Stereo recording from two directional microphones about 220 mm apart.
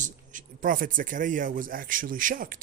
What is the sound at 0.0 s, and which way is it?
Speech, 35° right (ahead or behind).